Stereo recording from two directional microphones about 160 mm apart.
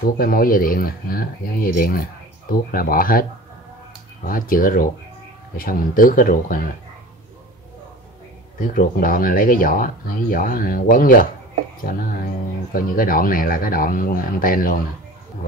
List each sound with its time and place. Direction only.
0.0 s speech: 65° left (ahead or behind)
4.3 s speech: 60° left (ahead or behind)
8.5 s speech: 60° left (ahead or behind)